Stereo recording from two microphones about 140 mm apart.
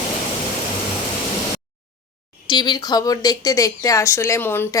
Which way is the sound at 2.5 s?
30° left (ahead or behind).